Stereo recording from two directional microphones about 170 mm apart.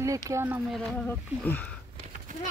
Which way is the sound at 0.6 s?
Centre (ahead or behind).